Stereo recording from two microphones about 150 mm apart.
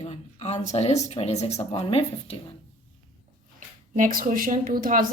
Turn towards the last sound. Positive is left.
turn(degrees=-70)  # may be behind; listen again after turning